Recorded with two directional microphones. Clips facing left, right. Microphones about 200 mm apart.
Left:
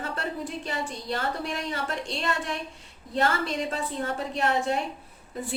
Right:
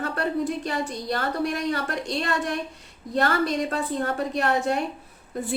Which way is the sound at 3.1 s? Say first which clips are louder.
Right 3 dB; 60° right (ahead or behind).